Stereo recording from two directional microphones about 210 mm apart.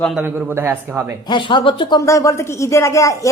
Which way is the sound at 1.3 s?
20° left (ahead or behind).